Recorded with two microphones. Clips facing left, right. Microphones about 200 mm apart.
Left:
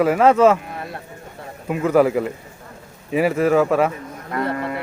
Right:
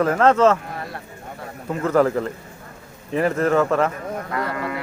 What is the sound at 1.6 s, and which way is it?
Speech, 15° left (ahead or behind).